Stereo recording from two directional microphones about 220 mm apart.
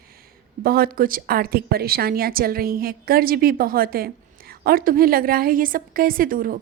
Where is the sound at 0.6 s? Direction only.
40° right (ahead or behind).